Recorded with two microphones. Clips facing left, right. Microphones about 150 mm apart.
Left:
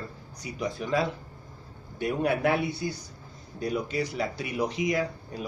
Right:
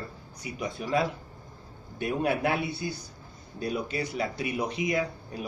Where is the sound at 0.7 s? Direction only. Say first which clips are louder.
Even; 25° right (ahead or behind).